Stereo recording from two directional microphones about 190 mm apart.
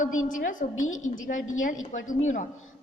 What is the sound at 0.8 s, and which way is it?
Speech, 90° left.